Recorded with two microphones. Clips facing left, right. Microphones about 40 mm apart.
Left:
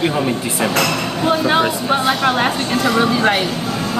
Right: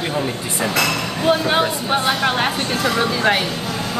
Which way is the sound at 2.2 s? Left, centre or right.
Centre.